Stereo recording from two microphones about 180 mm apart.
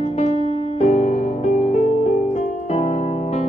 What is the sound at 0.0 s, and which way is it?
Music, 35° left (ahead or behind).